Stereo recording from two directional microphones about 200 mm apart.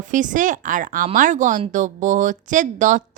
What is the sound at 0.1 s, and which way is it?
Speech, 40° right (ahead or behind).